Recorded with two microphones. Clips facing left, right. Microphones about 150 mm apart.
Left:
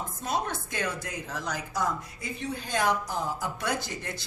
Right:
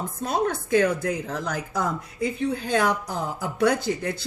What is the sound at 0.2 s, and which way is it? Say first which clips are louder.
Speech: right 6 dB; 55° right (ahead or behind).